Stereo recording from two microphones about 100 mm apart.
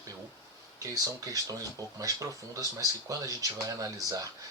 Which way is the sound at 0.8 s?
35° right (ahead or behind).